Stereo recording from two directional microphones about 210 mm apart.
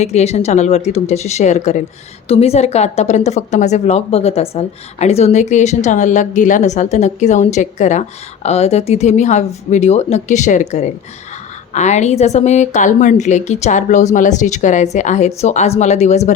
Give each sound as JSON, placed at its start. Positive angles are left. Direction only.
{"t": 0.0, "sound": "speech", "side_deg": 30}